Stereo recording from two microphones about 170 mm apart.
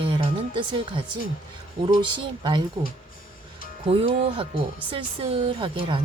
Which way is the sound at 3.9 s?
35° right (ahead or behind).